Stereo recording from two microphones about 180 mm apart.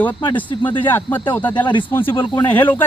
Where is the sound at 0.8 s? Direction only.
10° left (ahead or behind).